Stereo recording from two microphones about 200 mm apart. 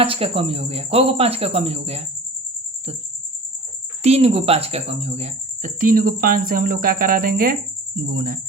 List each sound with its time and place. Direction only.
0.0 s speech: 30° right (ahead or behind)
4.0 s speech: 30° right (ahead or behind); by 8.4 s 45° right (ahead or behind)